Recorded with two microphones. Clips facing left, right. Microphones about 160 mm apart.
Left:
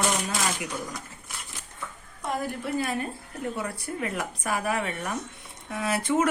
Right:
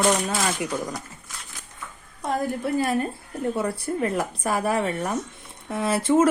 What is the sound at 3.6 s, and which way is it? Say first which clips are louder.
Speech: right 7 dB; 35° right (ahead or behind).